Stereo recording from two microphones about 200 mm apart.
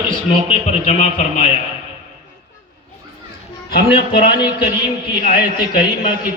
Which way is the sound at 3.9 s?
25° left (ahead or behind).